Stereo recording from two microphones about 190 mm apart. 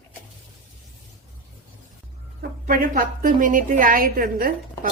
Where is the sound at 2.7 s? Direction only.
45° right (ahead or behind).